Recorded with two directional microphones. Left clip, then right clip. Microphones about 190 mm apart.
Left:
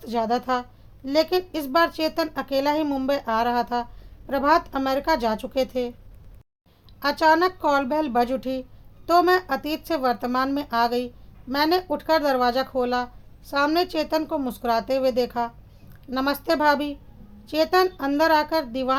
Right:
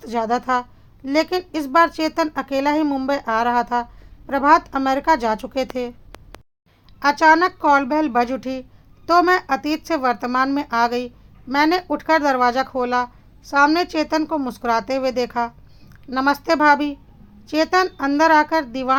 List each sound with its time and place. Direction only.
0.0 s speech: 20° right (ahead or behind)
7.0 s speech: 20° right (ahead or behind)